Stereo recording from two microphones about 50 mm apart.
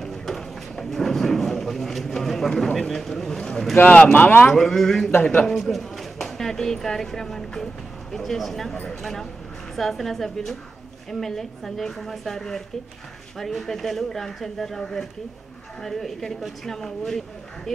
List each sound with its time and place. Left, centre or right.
0.0 s a sound: centre
3.8 s speech: left
4.6 s a woman's voice: centre